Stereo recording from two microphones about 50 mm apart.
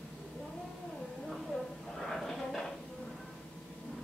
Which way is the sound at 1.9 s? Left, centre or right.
Centre.